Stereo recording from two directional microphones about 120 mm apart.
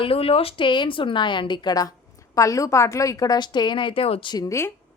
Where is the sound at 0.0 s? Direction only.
55° left (ahead or behind).